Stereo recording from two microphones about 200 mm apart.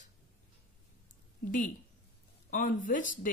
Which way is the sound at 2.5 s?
40° left (ahead or behind).